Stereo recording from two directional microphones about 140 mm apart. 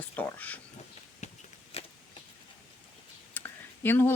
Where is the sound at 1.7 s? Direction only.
45° left (ahead or behind).